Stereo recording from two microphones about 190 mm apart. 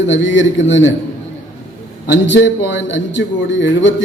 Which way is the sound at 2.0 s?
70° left (ahead or behind).